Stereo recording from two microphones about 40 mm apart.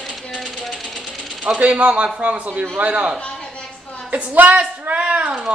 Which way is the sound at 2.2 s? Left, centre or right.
Right.